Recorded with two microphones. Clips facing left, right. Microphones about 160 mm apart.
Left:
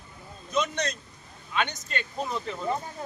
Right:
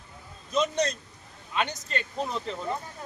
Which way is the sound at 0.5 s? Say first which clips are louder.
Right 2 dB; 35° right (ahead or behind).